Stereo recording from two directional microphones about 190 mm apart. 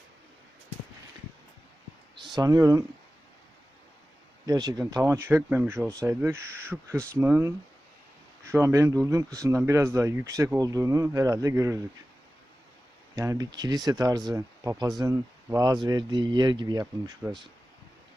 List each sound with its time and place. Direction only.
2.2 s speech: 20° right (ahead or behind)
4.4 s speech: 20° right (ahead or behind)
13.1 s speech: 15° right (ahead or behind)
17.2 s speech: 10° right (ahead or behind)